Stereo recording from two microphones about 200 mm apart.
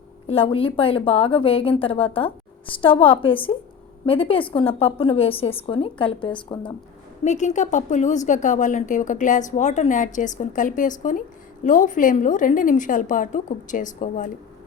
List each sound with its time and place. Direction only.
0.3 s a woman's voice: 30° left (ahead or behind)
7.3 s a woman's voice: 35° left (ahead or behind)